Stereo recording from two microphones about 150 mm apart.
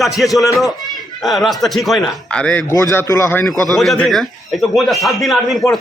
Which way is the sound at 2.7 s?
20° left (ahead or behind).